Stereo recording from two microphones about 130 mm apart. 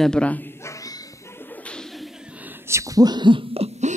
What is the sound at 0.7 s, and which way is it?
Shuffle, 25° left (ahead or behind).